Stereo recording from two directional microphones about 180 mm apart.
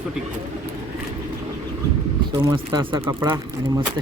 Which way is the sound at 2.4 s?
20° right (ahead or behind).